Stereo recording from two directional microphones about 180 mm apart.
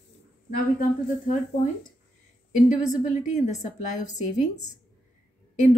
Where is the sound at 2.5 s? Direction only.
45° left (ahead or behind).